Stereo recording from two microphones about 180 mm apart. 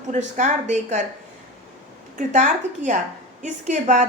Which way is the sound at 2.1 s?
40° right (ahead or behind).